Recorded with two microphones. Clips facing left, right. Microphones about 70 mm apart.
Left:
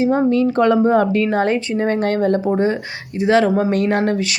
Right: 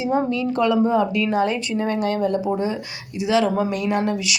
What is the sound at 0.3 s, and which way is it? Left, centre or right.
Speech, left.